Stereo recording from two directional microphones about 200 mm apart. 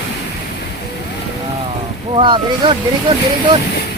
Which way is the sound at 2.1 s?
25° right (ahead or behind).